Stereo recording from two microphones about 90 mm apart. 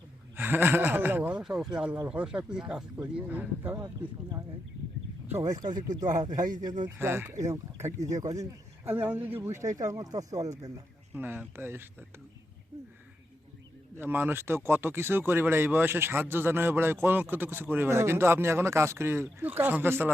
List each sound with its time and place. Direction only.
0.3 s a sound: 20° right (ahead or behind)
1.4 s speech: 5° right (ahead or behind); by 3.8 s 25° right (ahead or behind)
5.4 s speech: 35° right (ahead or behind)
5.6 s speech: 50° right (ahead or behind)
6.8 s speech: 25° right (ahead or behind)
7.3 s speech: 35° right (ahead or behind)
9.0 s speech: 20° right (ahead or behind)
9.5 s speech: 35° right (ahead or behind)
11.1 s speech: 20° right (ahead or behind)
13.9 s speech: 20° right (ahead or behind)